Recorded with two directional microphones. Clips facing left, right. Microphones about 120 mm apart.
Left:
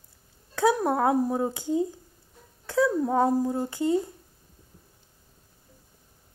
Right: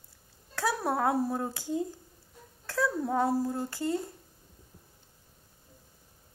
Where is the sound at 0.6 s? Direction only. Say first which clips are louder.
Left 6 dB; 20° left (ahead or behind).